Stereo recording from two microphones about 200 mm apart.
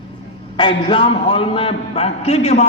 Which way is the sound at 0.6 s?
25° left (ahead or behind).